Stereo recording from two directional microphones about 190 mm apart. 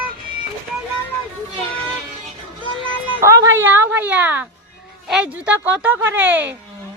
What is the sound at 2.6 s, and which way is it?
Music, 25° left (ahead or behind).